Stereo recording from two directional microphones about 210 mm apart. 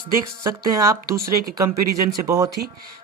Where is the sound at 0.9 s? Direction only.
45° right (ahead or behind).